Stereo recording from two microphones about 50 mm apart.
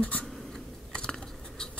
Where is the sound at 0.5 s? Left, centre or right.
Centre.